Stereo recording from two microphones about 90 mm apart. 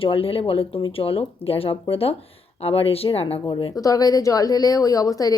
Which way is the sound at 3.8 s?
40° left (ahead or behind).